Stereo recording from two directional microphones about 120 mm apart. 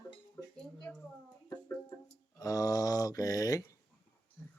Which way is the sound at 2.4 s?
30° left (ahead or behind).